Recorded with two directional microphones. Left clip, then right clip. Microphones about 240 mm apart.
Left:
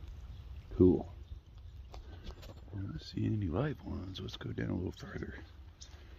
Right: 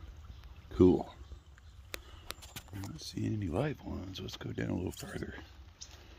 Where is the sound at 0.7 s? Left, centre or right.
Right.